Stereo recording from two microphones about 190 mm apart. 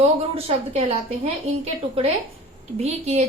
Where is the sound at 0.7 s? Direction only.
30° right (ahead or behind).